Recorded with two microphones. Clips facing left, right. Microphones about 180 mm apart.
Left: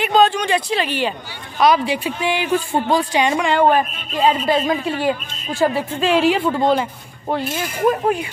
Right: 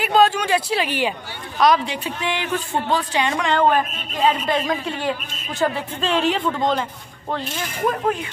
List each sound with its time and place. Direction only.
0.0 s speech: 5° right (ahead or behind)
1.6 s a woman's voice: 5° left (ahead or behind)
4.2 s speech: 25° left (ahead or behind)
4.5 s a woman's voice: 5° left (ahead or behind)